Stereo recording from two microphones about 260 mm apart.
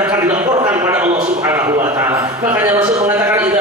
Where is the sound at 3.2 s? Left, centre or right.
Centre.